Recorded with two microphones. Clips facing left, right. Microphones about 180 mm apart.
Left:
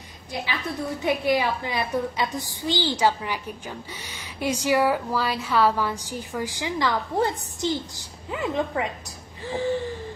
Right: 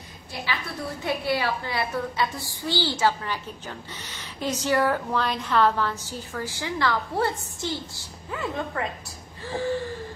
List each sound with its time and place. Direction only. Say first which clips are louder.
0.3 s a woman's voice: left 2 dB; 15° left (ahead or behind)